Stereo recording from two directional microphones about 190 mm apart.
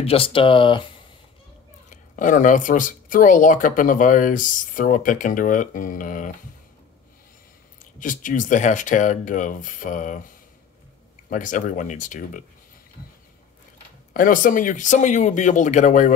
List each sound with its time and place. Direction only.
0.0 s speech: 30° left (ahead or behind)
1.9 s speech: 40° left (ahead or behind)
7.8 s speech: 45° left (ahead or behind)
11.2 s speech: 45° left (ahead or behind)
14.1 s speech: 45° left (ahead or behind)